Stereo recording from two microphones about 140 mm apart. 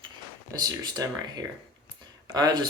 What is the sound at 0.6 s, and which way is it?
Speech, 25° right (ahead or behind).